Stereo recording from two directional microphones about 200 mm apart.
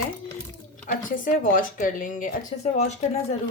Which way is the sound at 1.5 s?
40° left (ahead or behind).